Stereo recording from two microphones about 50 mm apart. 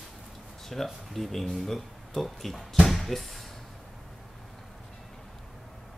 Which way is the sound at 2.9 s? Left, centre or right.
Centre.